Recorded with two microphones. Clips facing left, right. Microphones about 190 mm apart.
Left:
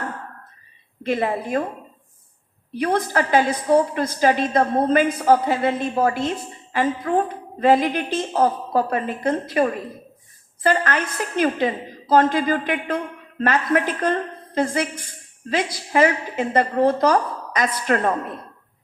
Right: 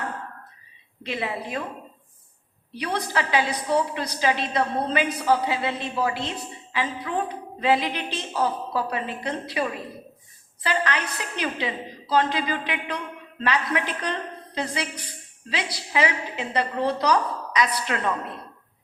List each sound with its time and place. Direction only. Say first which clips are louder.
1.0 s a woman's voice: left 7 dB; 50° left (ahead or behind)
2.7 s a woman's voice: left 6 dB; 50° left (ahead or behind)